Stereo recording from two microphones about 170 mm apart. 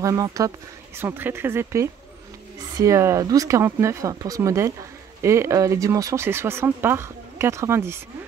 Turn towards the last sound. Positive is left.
turn(degrees=-15)  # may be behind; listen again after turning